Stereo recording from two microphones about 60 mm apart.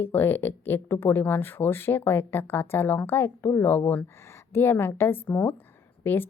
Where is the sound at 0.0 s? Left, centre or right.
Left.